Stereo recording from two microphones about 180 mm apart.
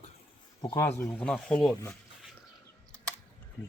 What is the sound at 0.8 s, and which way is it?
Speech, 15° left (ahead or behind).